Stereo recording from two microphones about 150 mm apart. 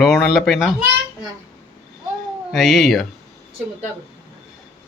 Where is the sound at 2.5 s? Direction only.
Centre (ahead or behind).